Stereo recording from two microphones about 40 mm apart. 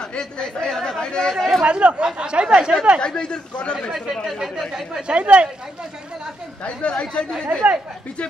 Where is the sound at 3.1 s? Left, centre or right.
Centre.